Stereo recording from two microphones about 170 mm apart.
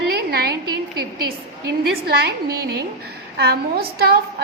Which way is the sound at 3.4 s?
65° right (ahead or behind).